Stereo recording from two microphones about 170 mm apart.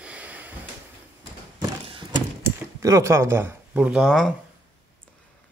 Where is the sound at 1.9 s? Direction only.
25° right (ahead or behind).